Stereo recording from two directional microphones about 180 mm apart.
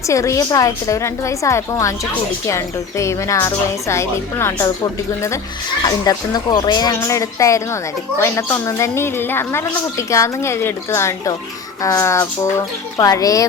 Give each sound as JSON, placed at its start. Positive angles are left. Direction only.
{"t": 0.1, "sound": "a woman's voice", "side_deg": 15}